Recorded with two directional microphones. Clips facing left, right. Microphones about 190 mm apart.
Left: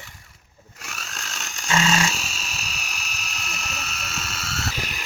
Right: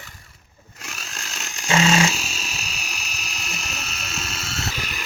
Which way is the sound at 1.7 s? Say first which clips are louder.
Right 3 dB; 30° right (ahead or behind).